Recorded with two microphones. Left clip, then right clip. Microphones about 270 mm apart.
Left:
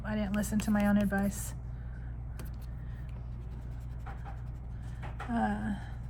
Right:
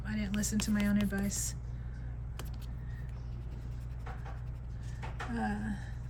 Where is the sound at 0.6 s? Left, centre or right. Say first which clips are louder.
Left 5 dB; centre.